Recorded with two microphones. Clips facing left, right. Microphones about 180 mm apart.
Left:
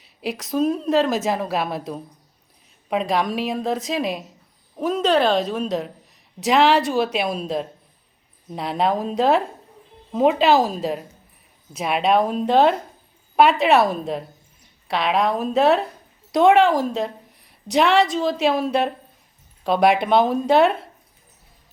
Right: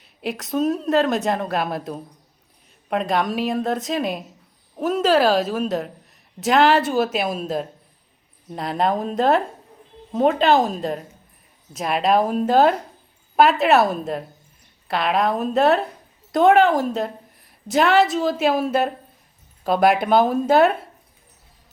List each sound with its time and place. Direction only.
0.0 s a woman's voice: centre (ahead or behind)